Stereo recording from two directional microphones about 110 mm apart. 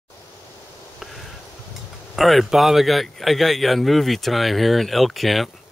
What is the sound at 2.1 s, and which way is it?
Speech, centre (ahead or behind).